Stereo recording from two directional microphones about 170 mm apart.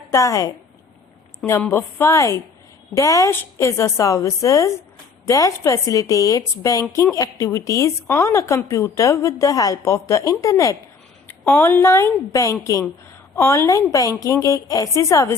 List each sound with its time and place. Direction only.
0.1 s a woman's voice: 20° left (ahead or behind)